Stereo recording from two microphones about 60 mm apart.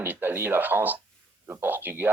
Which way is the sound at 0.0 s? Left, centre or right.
Right.